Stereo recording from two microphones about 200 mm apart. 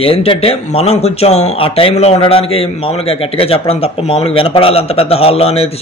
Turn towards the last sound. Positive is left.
turn(degrees=30)  # may be behind; listen again after turning